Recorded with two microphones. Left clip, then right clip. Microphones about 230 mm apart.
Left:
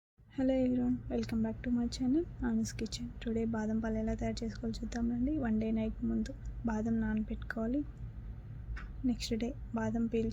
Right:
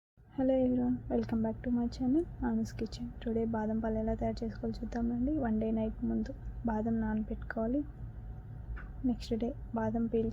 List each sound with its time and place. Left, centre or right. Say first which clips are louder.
0.3 s a woman's voice: right 2 dB; centre
9.0 s a woman's voice: right 1 dB; centre